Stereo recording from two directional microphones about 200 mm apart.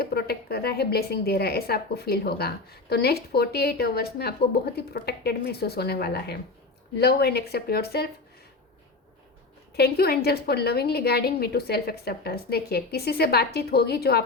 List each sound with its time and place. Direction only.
0.0 s speech: 50° left (ahead or behind)
9.7 s speech: 50° left (ahead or behind)